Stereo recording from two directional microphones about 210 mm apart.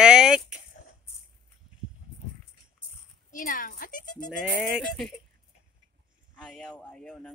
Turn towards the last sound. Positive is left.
turn(degrees=5)  # may be behind; listen again after turning